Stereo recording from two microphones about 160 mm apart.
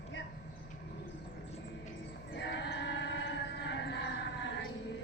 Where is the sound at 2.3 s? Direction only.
90° left.